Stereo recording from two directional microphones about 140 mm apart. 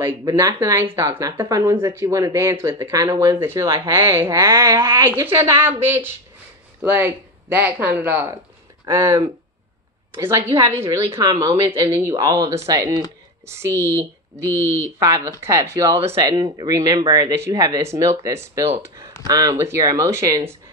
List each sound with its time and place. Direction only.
0.2 s speech: 25° right (ahead or behind)